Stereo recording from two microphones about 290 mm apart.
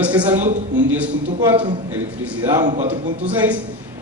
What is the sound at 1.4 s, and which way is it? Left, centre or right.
A man's voice, centre.